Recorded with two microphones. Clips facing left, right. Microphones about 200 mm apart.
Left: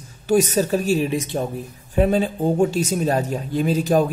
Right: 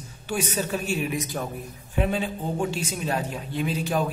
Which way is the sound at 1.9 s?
40° left (ahead or behind).